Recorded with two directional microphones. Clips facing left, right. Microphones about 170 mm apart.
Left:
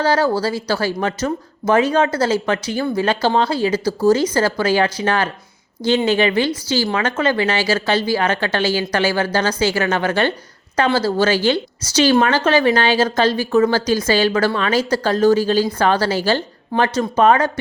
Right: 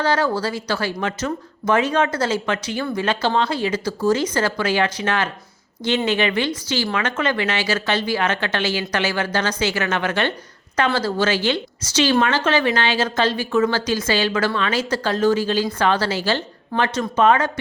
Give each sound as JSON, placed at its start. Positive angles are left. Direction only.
{"t": 0.0, "sound": "a woman's voice", "side_deg": 35}